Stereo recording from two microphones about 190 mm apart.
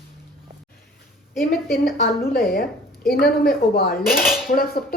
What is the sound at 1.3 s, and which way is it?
Speech, centre (ahead or behind).